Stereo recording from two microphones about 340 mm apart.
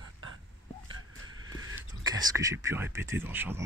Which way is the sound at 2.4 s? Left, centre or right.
Centre.